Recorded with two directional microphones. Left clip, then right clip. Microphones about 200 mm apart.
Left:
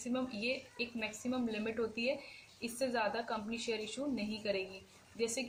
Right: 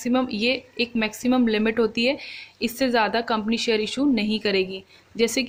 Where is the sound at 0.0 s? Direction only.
45° right (ahead or behind).